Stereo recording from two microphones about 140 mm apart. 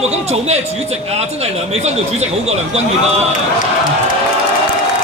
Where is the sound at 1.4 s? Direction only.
50° right (ahead or behind).